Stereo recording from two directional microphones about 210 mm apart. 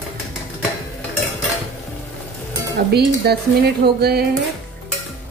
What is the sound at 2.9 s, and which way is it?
Speech, 50° right (ahead or behind).